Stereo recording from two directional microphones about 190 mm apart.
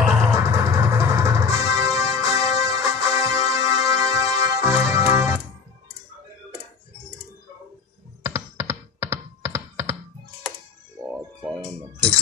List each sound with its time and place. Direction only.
0.0 s music: 5° right (ahead or behind)
8.2 s computer keyboard: 15° right (ahead or behind)
11.1 s music: 5° right (ahead or behind)